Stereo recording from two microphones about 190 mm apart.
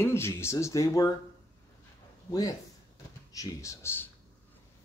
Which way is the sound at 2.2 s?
20° left (ahead or behind).